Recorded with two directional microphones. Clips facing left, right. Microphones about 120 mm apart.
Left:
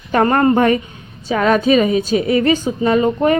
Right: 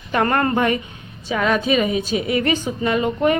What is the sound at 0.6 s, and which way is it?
A woman's voice, 40° left (ahead or behind).